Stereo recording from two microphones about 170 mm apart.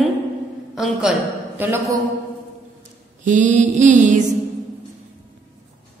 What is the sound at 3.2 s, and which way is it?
Mantra, 45° right (ahead or behind).